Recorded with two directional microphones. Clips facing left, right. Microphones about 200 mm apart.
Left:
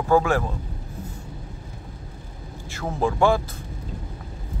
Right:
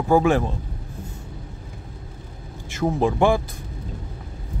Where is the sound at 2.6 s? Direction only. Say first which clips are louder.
Right 4 dB; 20° right (ahead or behind).